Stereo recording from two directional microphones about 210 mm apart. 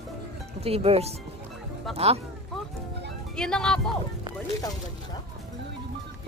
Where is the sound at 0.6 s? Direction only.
30° right (ahead or behind).